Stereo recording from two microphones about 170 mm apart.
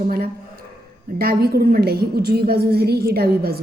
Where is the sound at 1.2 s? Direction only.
65° right (ahead or behind).